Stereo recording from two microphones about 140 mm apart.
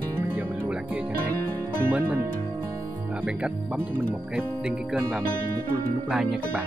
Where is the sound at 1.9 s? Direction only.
15° right (ahead or behind).